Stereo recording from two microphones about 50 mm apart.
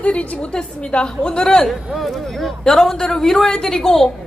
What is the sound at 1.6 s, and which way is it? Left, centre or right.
A man's voice, centre.